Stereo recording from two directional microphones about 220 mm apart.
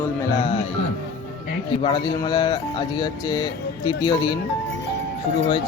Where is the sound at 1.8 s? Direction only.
20° left (ahead or behind).